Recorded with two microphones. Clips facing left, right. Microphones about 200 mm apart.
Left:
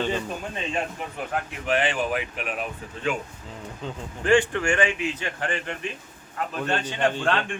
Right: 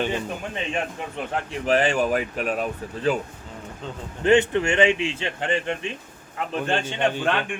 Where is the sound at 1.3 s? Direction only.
35° right (ahead or behind).